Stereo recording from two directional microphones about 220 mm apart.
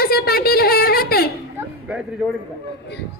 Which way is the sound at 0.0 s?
45° left (ahead or behind).